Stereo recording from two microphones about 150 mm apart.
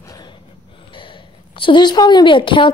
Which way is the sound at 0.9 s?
35° left (ahead or behind).